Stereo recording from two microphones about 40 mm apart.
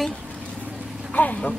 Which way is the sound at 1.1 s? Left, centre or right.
Left.